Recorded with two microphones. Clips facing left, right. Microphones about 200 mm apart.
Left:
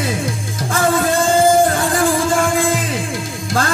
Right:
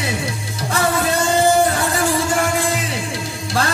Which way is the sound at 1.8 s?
50° left (ahead or behind).